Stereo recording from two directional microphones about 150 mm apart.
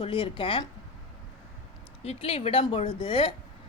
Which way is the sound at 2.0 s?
40° left (ahead or behind).